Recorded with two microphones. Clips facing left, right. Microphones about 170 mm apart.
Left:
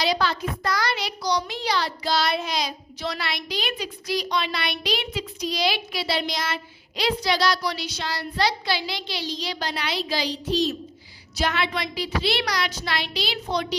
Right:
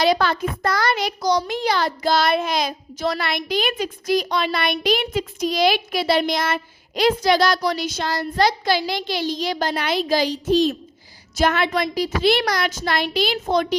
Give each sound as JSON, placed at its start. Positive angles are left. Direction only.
{"t": 0.0, "sound": "a child's voice", "side_deg": -55}